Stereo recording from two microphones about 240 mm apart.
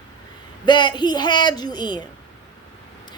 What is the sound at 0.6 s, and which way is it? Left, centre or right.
A woman's voice, centre.